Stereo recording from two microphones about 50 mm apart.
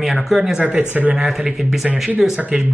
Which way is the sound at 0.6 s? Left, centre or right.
Right.